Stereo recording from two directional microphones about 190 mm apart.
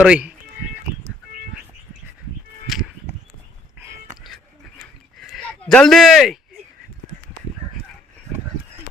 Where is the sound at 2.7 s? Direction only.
Centre (ahead or behind).